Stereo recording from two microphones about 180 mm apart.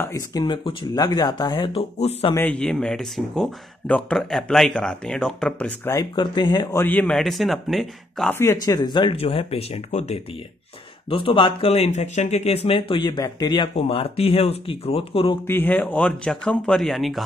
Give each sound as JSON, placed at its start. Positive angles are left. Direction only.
{"t": 0.0, "sound": "speech", "side_deg": 20}
{"t": 2.3, "sound": "speech", "side_deg": 5}
{"t": 6.1, "sound": "speech", "side_deg": 25}
{"t": 8.3, "sound": "speech", "side_deg": 15}
{"t": 15.4, "sound": "speech", "side_deg": 10}